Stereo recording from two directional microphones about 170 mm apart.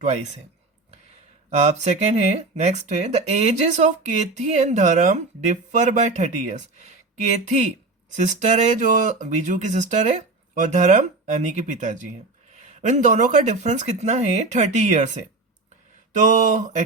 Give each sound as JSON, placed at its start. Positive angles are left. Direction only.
{"t": 0.0, "sound": "speech", "side_deg": -40}
{"t": 1.5, "sound": "speech", "side_deg": -40}